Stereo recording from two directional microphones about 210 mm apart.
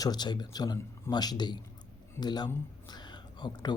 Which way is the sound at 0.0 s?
20° left (ahead or behind).